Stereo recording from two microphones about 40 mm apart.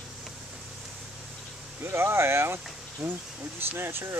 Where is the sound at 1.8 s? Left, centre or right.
Right.